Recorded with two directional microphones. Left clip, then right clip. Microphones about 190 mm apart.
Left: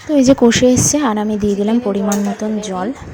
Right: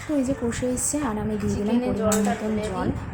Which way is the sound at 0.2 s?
40° left (ahead or behind).